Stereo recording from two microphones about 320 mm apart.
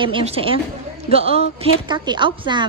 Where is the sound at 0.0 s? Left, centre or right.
Centre.